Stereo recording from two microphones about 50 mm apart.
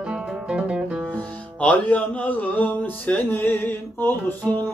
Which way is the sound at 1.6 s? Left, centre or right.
Left.